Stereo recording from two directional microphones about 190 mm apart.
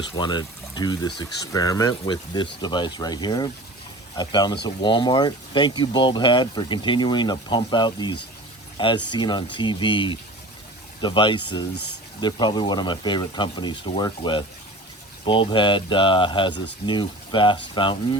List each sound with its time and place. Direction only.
0.2 s speech: 20° left (ahead or behind)